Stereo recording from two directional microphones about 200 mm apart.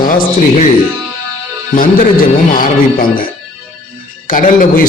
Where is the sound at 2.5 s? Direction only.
45° left (ahead or behind).